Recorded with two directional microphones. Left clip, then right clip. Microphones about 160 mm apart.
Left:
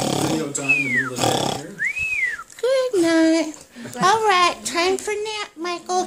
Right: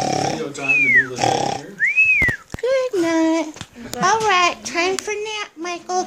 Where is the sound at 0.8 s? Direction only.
15° left (ahead or behind).